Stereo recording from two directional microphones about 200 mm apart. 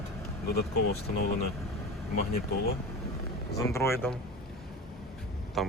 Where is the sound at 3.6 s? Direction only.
15° left (ahead or behind).